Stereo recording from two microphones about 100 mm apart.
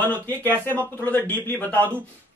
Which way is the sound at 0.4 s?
20° left (ahead or behind).